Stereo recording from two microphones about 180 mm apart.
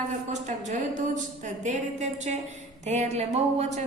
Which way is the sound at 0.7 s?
45° right (ahead or behind).